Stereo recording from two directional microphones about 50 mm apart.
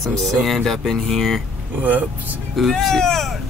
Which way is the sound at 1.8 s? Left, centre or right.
Right.